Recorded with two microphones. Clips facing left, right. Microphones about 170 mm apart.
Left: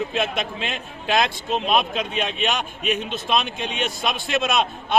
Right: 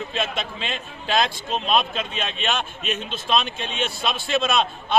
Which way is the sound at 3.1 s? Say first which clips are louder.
Even; 15° left (ahead or behind).